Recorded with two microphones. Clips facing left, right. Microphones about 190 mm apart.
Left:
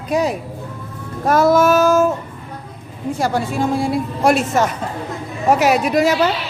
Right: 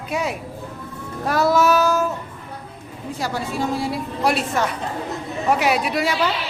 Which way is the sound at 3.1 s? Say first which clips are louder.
Left 6 dB; 50° left (ahead or behind).